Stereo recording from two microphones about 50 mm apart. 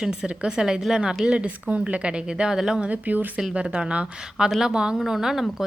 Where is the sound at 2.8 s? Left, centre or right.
Right.